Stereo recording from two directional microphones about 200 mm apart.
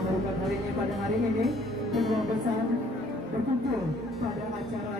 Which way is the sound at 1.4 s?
Centre (ahead or behind).